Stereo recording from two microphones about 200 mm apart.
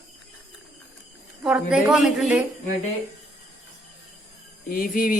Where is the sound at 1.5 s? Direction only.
5° right (ahead or behind).